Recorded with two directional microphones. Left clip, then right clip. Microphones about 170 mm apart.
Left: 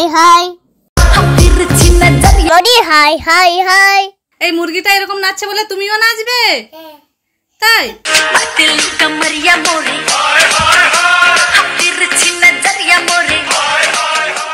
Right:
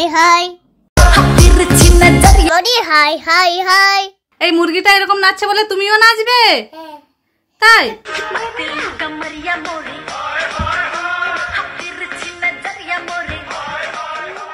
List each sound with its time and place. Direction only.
0.0 s a child's voice: 15° left (ahead or behind)
0.9 s music: centre (ahead or behind)
2.5 s a child's voice: 20° left (ahead or behind)
4.4 s a woman's voice: 20° right (ahead or behind)
7.6 s a child's voice: 15° right (ahead or behind)
8.0 s music: 45° left (ahead or behind)